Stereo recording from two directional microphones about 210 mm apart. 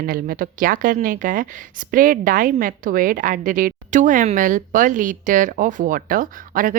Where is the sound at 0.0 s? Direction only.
45° right (ahead or behind).